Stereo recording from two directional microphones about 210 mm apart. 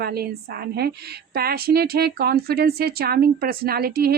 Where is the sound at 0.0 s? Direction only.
50° right (ahead or behind).